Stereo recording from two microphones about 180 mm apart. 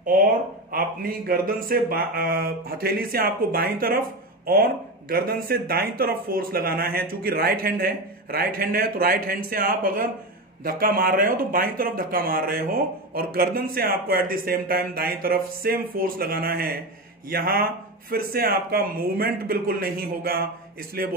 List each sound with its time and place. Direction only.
0.7 s speech: 55° right (ahead or behind)
5.1 s speech: 55° right (ahead or behind)